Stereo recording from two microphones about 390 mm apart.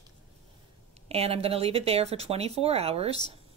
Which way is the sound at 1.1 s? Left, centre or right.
Centre.